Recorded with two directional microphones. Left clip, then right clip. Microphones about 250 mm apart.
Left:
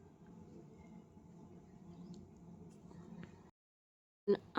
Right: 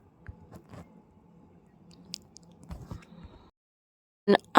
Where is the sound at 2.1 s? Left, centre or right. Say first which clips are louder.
Right 17 dB; right.